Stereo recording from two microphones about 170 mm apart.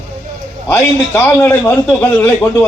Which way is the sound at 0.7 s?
15° left (ahead or behind).